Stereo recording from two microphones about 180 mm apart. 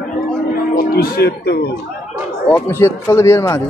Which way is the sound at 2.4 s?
15° left (ahead or behind).